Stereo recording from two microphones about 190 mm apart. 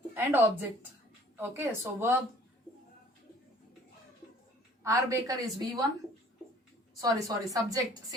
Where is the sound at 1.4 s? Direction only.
10° right (ahead or behind).